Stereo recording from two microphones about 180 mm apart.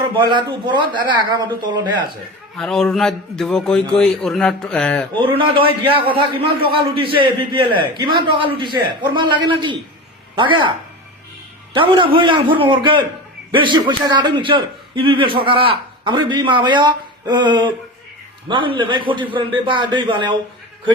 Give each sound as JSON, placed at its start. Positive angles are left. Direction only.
{"t": 0.2, "sound": "a man's voice", "side_deg": -25}
{"t": 2.6, "sound": "a man's voice", "side_deg": 5}
{"t": 5.2, "sound": "a man's voice", "side_deg": -30}
{"t": 11.7, "sound": "a man's voice", "side_deg": -30}